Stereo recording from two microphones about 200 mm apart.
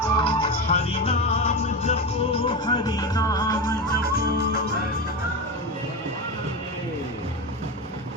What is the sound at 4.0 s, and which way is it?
Music, 55° left (ahead or behind).